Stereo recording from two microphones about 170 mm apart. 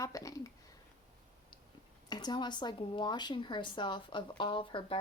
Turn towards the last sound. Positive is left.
turn(degrees=30)  # may be behind; listen again after turning